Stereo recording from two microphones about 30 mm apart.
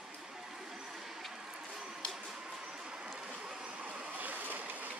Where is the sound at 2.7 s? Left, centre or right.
Right.